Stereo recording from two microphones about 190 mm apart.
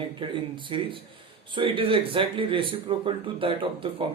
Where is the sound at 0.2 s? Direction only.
25° right (ahead or behind).